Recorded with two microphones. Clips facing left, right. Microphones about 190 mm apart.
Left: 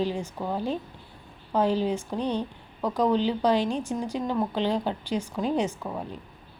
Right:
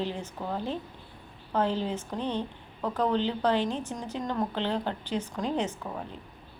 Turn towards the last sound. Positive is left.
turn(degrees=10)  # may be behind; listen again after turning